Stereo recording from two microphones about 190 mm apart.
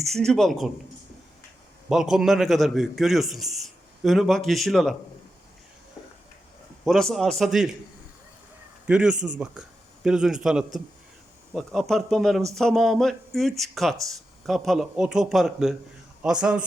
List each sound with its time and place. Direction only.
0.0 s a man's voice: centre (ahead or behind)
1.9 s a man's voice: centre (ahead or behind)
6.8 s a man's voice: centre (ahead or behind)
8.9 s a man's voice: 5° right (ahead or behind)